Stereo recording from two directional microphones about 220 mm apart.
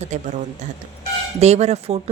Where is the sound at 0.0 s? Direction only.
30° right (ahead or behind).